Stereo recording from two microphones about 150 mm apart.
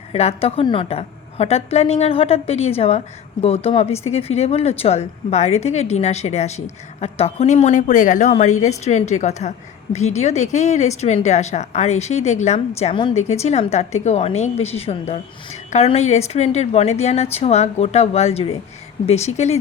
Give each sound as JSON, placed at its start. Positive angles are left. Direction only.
{"t": 0.1, "sound": "a woman's voice", "side_deg": 45}